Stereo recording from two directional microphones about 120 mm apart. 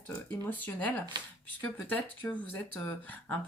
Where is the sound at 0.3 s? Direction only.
15° left (ahead or behind).